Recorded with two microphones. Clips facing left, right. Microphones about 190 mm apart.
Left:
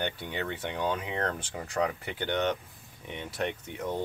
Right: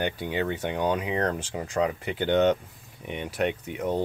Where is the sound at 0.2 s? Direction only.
10° right (ahead or behind).